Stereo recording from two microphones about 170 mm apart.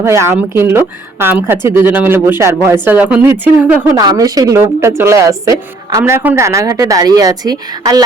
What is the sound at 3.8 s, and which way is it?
A woman's voice, 20° right (ahead or behind).